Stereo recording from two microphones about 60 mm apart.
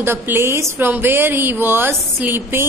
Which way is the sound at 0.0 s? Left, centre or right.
Right.